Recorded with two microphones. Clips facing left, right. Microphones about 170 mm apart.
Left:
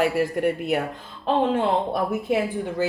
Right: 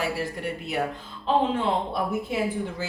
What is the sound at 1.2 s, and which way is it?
Speech, 50° left (ahead or behind).